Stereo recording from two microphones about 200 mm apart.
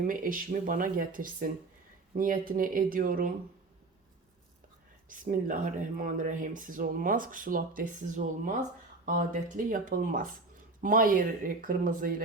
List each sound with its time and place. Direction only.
0.1 s speech: 45° right (ahead or behind)
5.0 s speech: 40° right (ahead or behind)